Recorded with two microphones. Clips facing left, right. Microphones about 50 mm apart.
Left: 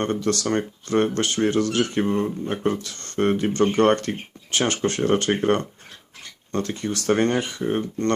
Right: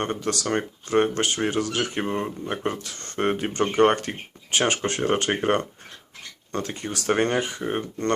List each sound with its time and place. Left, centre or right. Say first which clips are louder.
0.0 s speech: left 3 dB; centre